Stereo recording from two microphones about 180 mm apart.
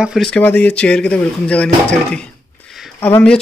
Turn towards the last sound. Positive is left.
turn(degrees=5)  # may be behind; listen again after turning